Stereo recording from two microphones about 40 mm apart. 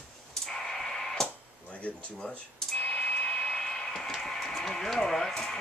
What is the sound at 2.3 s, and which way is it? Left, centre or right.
Cash register, left.